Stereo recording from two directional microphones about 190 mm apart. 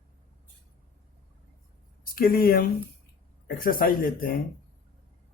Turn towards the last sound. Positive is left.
turn(degrees=50)  # may be behind; listen again after turning